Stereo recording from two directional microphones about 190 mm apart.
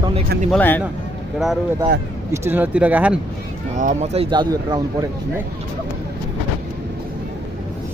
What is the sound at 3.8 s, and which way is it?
Speech, 35° right (ahead or behind).